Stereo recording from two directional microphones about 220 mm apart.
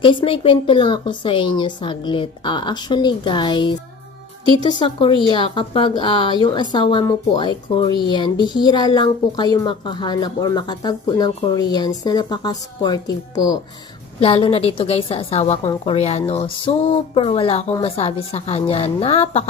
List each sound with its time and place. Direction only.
0.0 s speech: 25° left (ahead or behind)